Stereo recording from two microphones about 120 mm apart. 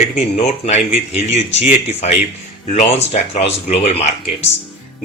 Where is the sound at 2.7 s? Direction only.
75° left (ahead or behind).